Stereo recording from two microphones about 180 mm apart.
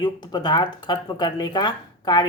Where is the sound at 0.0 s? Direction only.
25° left (ahead or behind).